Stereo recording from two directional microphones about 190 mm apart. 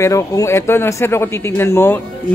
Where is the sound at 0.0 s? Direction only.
15° left (ahead or behind).